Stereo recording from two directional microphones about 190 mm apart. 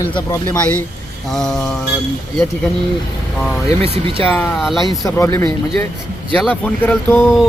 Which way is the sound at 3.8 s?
30° right (ahead or behind).